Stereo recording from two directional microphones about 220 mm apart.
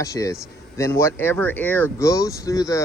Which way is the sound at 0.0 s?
15° left (ahead or behind).